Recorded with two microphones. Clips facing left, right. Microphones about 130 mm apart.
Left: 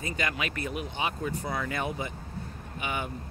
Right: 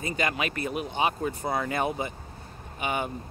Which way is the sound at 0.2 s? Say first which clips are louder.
Right 4 dB; 40° right (ahead or behind).